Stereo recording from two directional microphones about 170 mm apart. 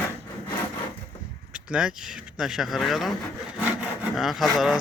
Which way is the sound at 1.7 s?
5° right (ahead or behind).